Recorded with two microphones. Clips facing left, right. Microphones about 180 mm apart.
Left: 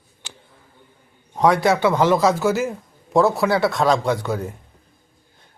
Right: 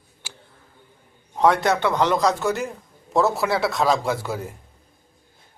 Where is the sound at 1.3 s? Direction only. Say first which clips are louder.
Left 2 dB; centre (ahead or behind).